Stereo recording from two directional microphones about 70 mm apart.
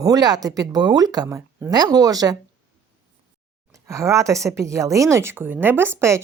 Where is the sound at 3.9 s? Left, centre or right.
Right.